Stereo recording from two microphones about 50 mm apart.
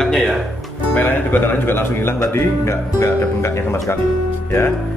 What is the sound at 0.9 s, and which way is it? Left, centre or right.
Speech, left.